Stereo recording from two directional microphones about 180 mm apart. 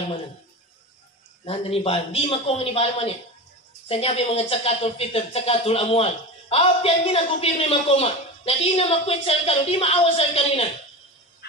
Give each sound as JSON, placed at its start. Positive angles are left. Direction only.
{"t": 1.4, "sound": "speech", "side_deg": 35}